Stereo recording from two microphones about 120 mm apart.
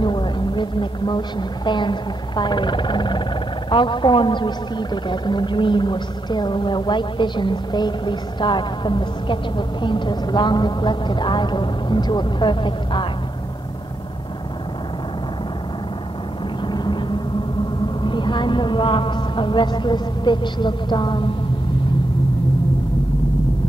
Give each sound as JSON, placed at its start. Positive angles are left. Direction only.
{"t": 0.0, "sound": "a woman's voice", "side_deg": 40}
{"t": 16.6, "sound": "vehicle", "side_deg": 40}
{"t": 18.0, "sound": "a woman's voice", "side_deg": 40}